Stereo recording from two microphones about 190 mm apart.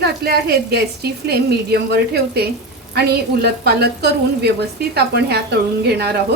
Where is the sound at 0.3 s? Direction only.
55° right (ahead or behind).